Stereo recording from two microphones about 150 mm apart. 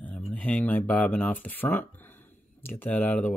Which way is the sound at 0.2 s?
10° left (ahead or behind).